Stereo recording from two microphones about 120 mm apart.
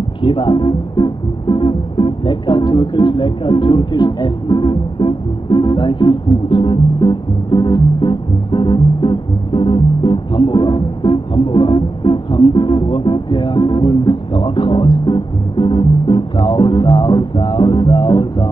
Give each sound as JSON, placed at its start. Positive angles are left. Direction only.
{"t": 0.2, "sound": "speech", "side_deg": 45}